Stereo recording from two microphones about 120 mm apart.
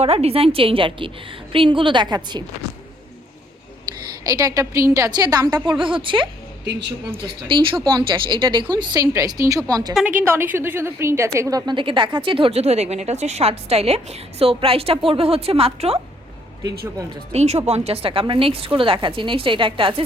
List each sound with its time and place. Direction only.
0.0 s a woman's voice: 55° right (ahead or behind); by 2.4 s 40° right (ahead or behind)
4.2 s a woman's voice: 30° right (ahead or behind)
10.1 s a woman's voice: 15° right (ahead or behind); by 16.0 s 55° right (ahead or behind)
17.3 s a woman's voice: 65° right (ahead or behind); by 20.0 s 45° right (ahead or behind)